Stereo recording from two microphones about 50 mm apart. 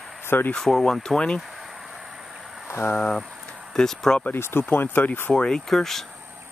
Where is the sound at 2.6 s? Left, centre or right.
Left.